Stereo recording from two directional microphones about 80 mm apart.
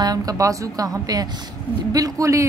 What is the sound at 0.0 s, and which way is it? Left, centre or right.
A woman's voice, right.